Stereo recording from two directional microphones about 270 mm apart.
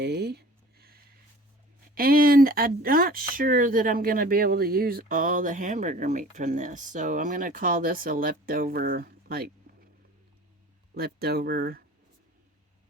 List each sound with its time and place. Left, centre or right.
0.0 s a sound: right
2.0 s speech: right
10.9 s speech: right